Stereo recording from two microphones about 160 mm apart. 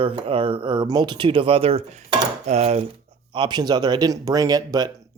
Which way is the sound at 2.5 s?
40° right (ahead or behind).